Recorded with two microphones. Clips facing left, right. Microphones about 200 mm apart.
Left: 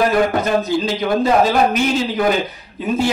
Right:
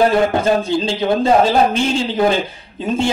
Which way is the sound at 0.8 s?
30° right (ahead or behind).